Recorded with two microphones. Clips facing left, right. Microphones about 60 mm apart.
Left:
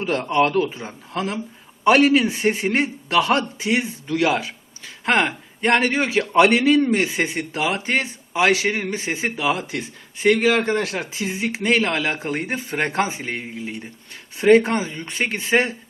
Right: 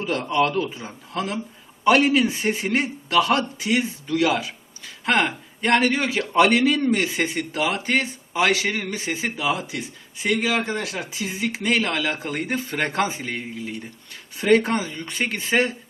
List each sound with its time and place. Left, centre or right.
0.0 s a man's voice: left
1.1 s a man's voice: left